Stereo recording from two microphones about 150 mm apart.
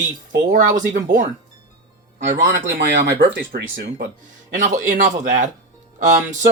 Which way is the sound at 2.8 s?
90° right.